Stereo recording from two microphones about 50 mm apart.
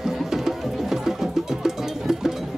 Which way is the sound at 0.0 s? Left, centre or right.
Centre.